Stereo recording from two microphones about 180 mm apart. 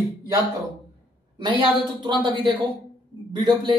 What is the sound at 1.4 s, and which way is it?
A woman's voice, 30° right (ahead or behind).